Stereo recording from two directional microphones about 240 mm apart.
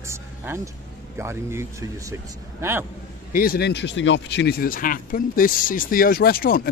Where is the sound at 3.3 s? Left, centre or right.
Left.